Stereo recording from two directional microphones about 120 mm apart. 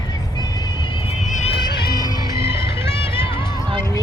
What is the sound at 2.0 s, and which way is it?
Music, 45° left (ahead or behind).